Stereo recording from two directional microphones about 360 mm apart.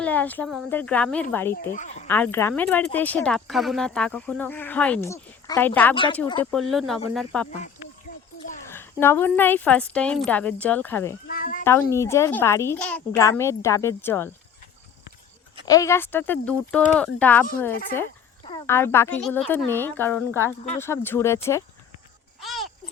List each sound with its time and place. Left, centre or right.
0.0 s speech: centre
1.7 s speech: centre
2.0 s speech: centre
8.6 s speech: centre
11.3 s a sound: left
11.6 s a woman's voice: centre
15.6 s a woman's voice: centre
22.4 s a sound: centre